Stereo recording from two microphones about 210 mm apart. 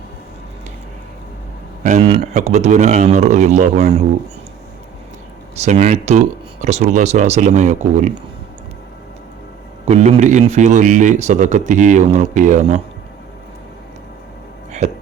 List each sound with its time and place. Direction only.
1.8 s a man's voice: 35° right (ahead or behind)
5.6 s a man's voice: 35° right (ahead or behind)
9.8 s a man's voice: 30° right (ahead or behind)